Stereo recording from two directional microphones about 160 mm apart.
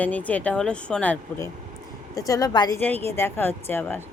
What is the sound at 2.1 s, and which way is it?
A woman's voice, 20° left (ahead or behind).